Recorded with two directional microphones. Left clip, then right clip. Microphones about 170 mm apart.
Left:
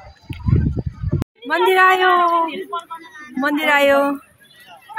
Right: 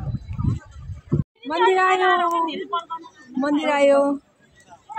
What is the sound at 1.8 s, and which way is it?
Speech, 10° left (ahead or behind).